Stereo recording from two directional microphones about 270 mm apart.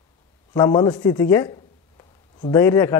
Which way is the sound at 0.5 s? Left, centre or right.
Centre.